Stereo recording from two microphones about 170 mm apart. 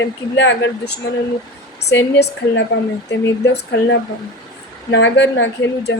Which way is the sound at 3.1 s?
90° left.